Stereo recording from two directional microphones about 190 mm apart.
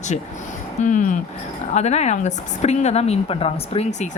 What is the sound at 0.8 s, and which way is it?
A woman's voice, 40° left (ahead or behind).